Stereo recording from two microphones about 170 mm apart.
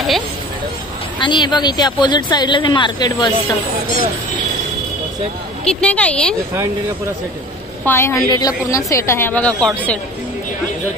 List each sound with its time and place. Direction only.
1.2 s speech: 25° left (ahead or behind)
5.7 s a woman's voice: 5° left (ahead or behind)
7.8 s a woman's voice: 15° left (ahead or behind)